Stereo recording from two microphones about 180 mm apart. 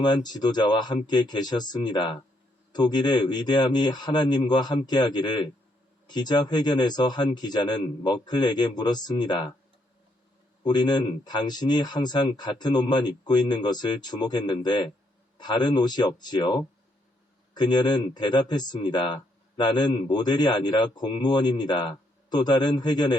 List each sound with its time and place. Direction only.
0.0 s speech: 25° left (ahead or behind)
10.6 s speech: 25° left (ahead or behind)